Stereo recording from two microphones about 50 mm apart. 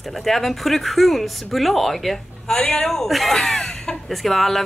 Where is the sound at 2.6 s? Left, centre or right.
Centre.